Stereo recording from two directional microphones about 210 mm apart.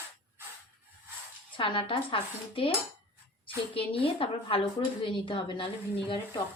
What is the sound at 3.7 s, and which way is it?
A woman's voice, 25° left (ahead or behind).